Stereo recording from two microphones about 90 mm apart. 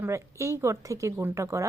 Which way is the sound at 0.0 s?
30° right (ahead or behind).